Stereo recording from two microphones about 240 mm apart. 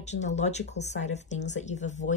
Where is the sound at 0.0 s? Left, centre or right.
Left.